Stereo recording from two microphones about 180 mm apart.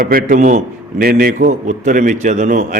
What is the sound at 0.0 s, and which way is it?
A man's voice, 55° right (ahead or behind).